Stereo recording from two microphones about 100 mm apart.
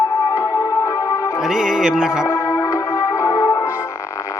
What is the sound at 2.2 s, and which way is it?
Music, 30° left (ahead or behind).